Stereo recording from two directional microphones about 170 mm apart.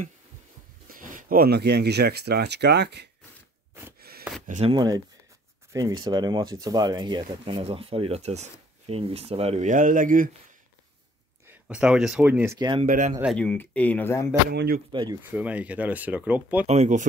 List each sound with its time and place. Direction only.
0.8 s speech: 55° right (ahead or behind); by 3.1 s 85° right
4.5 s speech: 40° right (ahead or behind)
4.7 s speech: 20° right (ahead or behind); by 10.3 s 50° right (ahead or behind)
11.4 s speech: 5° right (ahead or behind)
12.5 s speech: 25° right (ahead or behind)
12.8 s speech: 50° right (ahead or behind)
13.4 s speech: 10° left (ahead or behind)
14.5 s speech: 75° right (ahead or behind)
14.9 s speech: 25° right (ahead or behind)
15.3 s speech: 10° right (ahead or behind)
16.6 s speech: 40° right (ahead or behind)